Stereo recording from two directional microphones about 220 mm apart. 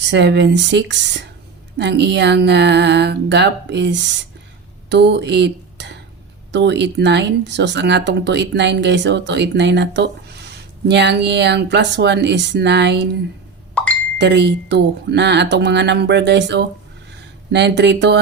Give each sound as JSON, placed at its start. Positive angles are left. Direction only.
{"t": 0.0, "sound": "speech", "side_deg": -50}
{"t": 14.2, "sound": "speech", "side_deg": -50}